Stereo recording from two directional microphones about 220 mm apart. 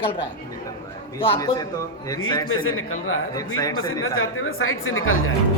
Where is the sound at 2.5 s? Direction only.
65° left (ahead or behind).